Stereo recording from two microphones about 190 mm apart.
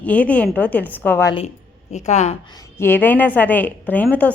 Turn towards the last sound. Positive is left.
turn(degrees=10)  # may be behind; listen again after turning